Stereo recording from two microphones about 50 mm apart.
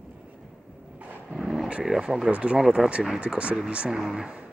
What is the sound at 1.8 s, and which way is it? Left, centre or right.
Speech, centre.